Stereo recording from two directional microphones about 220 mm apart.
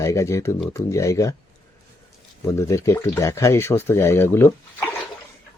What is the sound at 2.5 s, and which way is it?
Speech, 15° left (ahead or behind).